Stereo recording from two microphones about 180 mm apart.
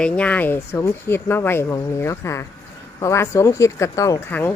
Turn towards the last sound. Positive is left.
turn(degrees=10)  # may be behind; listen again after turning